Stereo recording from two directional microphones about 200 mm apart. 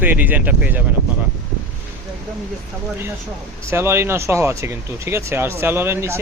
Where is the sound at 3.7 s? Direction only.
15° right (ahead or behind).